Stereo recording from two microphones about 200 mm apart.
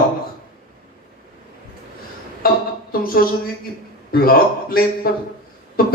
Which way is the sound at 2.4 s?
45° left (ahead or behind).